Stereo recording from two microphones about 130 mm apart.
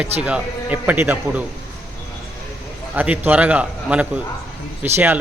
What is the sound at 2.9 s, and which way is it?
A man's voice, 15° right (ahead or behind).